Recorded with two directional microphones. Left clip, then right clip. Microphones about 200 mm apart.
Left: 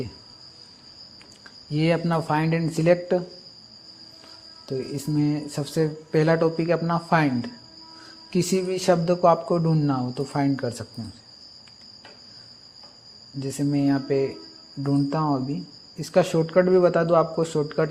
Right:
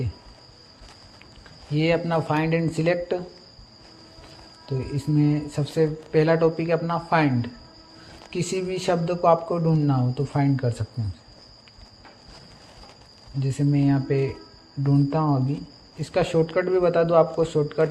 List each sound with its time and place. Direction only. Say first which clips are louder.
1.7 s speech: right 1 dB; 45° left (ahead or behind)
4.8 s speech: right 2 dB; 45° left (ahead or behind)
13.4 s speech: even; 40° left (ahead or behind)